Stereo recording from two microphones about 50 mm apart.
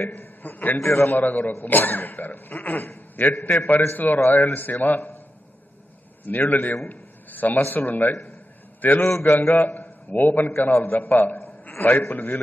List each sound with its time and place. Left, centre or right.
0.0 s a man's voice: left
0.7 s a man's voice: left
1.0 s cough: left
6.2 s cough: left
6.9 s a sound: left
7.7 s cough: left
9.7 s a man's voice: left
10.5 s a man's voice: left
11.8 s cough: left